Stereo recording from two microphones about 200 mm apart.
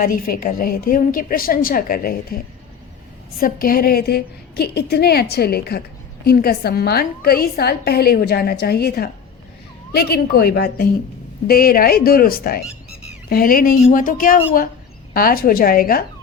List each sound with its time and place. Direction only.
0.0 s a woman's voice: 45° left (ahead or behind)
3.4 s a woman's voice: 45° left (ahead or behind)